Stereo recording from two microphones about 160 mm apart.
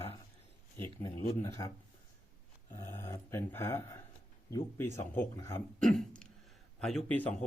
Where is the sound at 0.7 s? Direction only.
20° left (ahead or behind).